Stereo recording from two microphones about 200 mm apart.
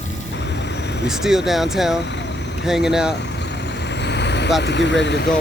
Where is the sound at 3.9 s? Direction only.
60° left (ahead or behind).